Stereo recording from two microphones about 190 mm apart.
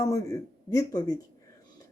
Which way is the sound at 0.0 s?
15° left (ahead or behind).